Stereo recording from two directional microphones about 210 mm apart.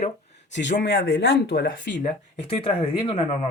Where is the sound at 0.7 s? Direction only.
40° left (ahead or behind).